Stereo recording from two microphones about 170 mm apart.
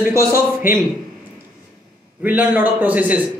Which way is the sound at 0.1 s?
15° right (ahead or behind).